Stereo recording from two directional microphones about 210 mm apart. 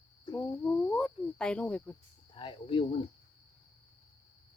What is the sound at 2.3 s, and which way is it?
Speech, 25° left (ahead or behind).